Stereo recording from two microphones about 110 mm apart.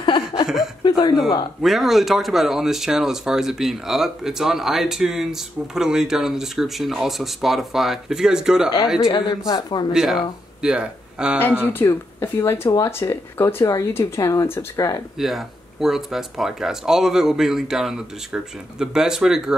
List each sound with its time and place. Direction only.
0.8 s a sound: 40° left (ahead or behind)
1.6 s speech: centre (ahead or behind)
9.1 s speech: 45° left (ahead or behind)
9.9 s speech: 5° right (ahead or behind)
11.3 s speech: 20° left (ahead or behind)
15.1 s speech: centre (ahead or behind)